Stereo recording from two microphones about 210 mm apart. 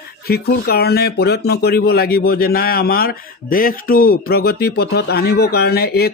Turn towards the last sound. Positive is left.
turn(degrees=50)  # may be behind; listen again after turning